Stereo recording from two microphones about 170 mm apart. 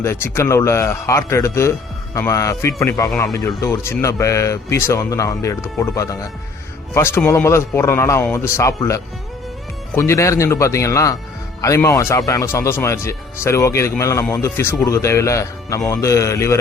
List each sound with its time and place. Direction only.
0.0 s speech: 15° left (ahead or behind)